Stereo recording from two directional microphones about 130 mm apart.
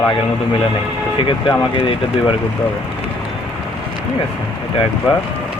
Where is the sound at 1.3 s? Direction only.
40° left (ahead or behind).